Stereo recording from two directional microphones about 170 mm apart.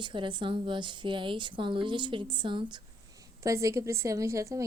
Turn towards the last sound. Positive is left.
turn(degrees=-20)  # may be behind; listen again after turning